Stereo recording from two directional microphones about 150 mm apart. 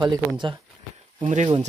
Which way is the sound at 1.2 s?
50° right (ahead or behind).